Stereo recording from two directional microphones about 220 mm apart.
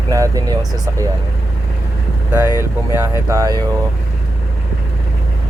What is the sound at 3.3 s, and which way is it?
Speech, 15° right (ahead or behind).